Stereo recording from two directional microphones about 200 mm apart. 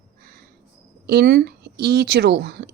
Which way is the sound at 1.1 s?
55° right (ahead or behind).